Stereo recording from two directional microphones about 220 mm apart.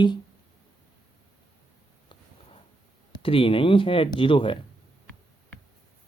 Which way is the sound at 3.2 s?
25° left (ahead or behind).